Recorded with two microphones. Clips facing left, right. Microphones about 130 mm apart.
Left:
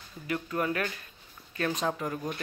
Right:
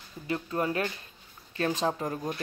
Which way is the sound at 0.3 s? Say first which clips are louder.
Right 1 dB; 30° right (ahead or behind).